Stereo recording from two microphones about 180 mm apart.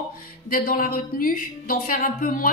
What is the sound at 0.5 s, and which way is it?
A woman's voice, 50° left (ahead or behind).